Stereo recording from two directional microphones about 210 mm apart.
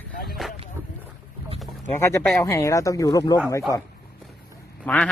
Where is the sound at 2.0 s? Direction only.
10° left (ahead or behind).